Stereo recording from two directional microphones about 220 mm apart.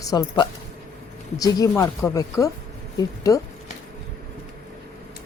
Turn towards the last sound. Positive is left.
turn(degrees=15)  # may be behind; listen again after turning